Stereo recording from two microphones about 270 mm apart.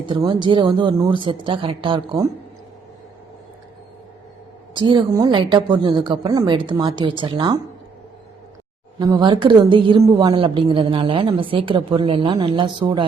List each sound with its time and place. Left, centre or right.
0.0 s a woman's voice: centre
4.7 s a woman's voice: centre
9.0 s a woman's voice: centre